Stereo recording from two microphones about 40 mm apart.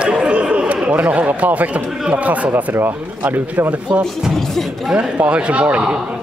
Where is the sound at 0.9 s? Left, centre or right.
Right.